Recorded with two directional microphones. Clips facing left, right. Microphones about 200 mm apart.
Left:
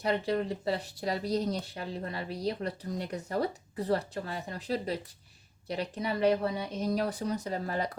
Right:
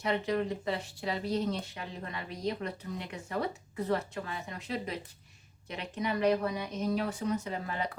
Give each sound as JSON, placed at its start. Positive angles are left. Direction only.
{"t": 0.0, "sound": "speech", "side_deg": 35}